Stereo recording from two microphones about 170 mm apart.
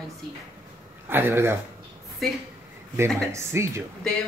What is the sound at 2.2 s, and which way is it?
Speech, centre (ahead or behind).